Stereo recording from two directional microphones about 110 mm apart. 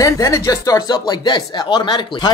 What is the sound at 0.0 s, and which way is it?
Speech, 30° left (ahead or behind).